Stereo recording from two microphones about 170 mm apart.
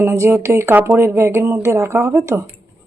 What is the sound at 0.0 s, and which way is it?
Speech, 15° right (ahead or behind).